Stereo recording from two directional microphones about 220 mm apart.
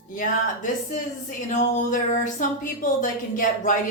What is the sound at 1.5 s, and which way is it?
A woman's voice, 35° left (ahead or behind).